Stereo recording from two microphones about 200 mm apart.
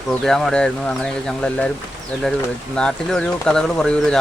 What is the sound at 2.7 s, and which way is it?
Speech, 5° left (ahead or behind).